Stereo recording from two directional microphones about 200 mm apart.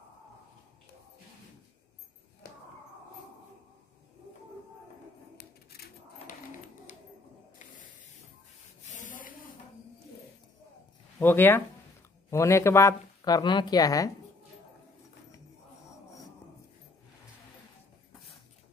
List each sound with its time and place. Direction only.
6.9 s a sound: 35° left (ahead or behind)
8.9 s rub: 40° left (ahead or behind)
11.1 s speech: 10° left (ahead or behind)